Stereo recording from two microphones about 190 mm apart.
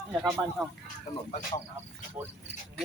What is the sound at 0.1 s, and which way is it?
Speech, 5° right (ahead or behind).